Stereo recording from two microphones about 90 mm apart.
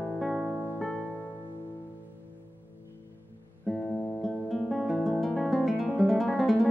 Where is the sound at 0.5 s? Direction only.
20° right (ahead or behind).